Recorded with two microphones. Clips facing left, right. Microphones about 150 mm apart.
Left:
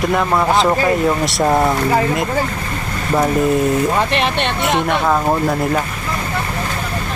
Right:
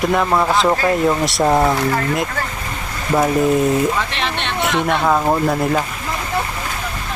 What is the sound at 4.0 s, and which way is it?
Speech, 55° left (ahead or behind).